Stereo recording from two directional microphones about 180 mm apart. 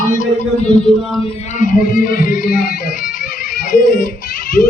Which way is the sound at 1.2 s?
45° left (ahead or behind).